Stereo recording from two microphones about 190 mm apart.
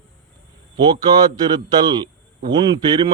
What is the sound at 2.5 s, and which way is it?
Speech, 20° right (ahead or behind).